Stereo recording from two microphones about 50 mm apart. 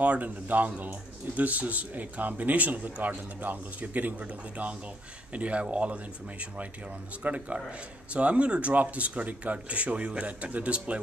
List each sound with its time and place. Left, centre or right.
0.0 s speech: right
7.2 s speech: right